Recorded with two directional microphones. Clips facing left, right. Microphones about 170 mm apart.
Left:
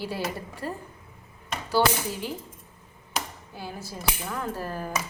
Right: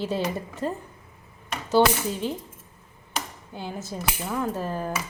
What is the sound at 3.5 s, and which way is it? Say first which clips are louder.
A woman's voice: right 5 dB; 20° right (ahead or behind).